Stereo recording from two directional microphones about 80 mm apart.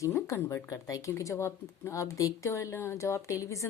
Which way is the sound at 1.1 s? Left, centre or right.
Left.